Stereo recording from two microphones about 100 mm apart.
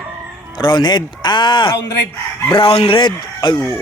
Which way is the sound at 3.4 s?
50° left (ahead or behind).